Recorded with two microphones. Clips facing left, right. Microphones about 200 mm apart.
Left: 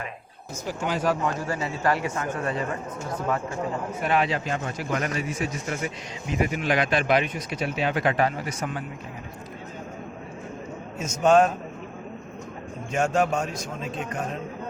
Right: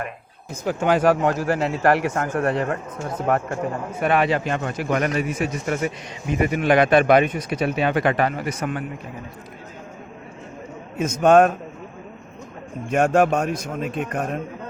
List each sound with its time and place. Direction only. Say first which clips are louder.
0.6 s speech: right 8 dB; 65° right (ahead or behind)
10.9 s speech: right 4 dB; 60° right (ahead or behind)
12.9 s speech: right 6 dB; 60° right (ahead or behind)